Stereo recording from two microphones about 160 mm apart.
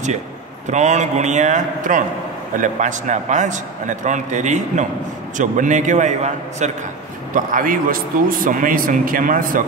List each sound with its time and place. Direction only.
0.7 s a man's voice: 45° right (ahead or behind)
7.3 s a man's voice: 60° right (ahead or behind)